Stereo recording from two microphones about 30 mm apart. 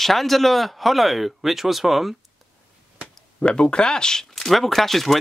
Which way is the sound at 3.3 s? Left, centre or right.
Left.